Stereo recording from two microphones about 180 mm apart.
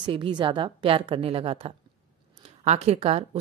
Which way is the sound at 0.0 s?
25° right (ahead or behind).